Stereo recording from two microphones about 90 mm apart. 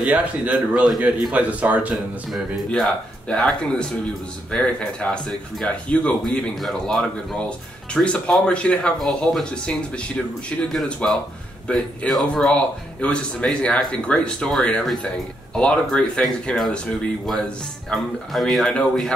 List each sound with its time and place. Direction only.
0.0 s a man's voice: 10° right (ahead or behind)
1.3 s a man's voice: 15° right (ahead or behind)
2.3 s speech: 5° left (ahead or behind)
10.9 s speech: 10° left (ahead or behind)